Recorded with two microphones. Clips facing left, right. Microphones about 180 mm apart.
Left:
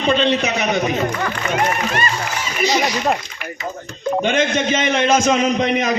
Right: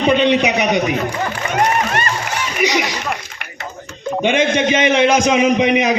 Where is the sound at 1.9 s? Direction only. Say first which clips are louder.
Right 1 dB; 55° right (ahead or behind).